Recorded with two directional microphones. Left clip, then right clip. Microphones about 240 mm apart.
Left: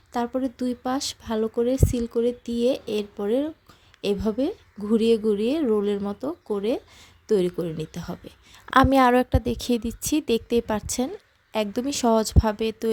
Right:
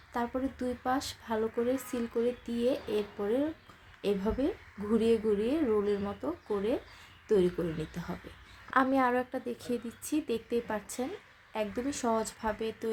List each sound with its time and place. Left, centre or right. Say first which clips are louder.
0.1 s a woman's voice: left 7 dB; left